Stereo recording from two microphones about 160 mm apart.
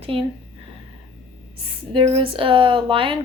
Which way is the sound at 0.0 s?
35° right (ahead or behind).